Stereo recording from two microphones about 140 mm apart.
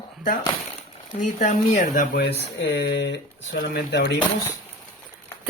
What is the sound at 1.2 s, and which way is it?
Speech, 65° left (ahead or behind).